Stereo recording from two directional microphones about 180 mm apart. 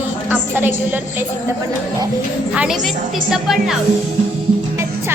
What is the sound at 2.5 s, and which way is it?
A woman's voice, 5° right (ahead or behind).